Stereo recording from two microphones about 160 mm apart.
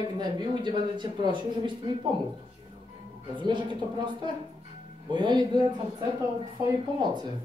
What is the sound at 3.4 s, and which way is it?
Speech, 30° right (ahead or behind).